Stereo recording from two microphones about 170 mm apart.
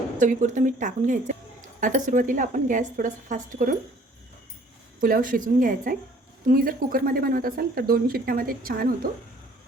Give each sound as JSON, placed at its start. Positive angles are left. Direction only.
{"t": 0.2, "sound": "a woman's voice", "side_deg": -50}
{"t": 4.9, "sound": "a woman's voice", "side_deg": -55}